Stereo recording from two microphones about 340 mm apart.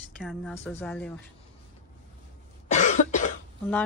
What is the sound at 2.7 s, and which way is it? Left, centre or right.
Cough, left.